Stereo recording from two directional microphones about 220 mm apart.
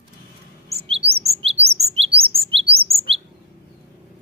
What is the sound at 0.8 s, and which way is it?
Chirp, 25° right (ahead or behind).